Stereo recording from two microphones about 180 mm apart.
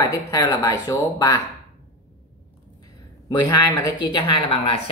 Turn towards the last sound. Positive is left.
turn(degrees=30)  # may be behind; listen again after turning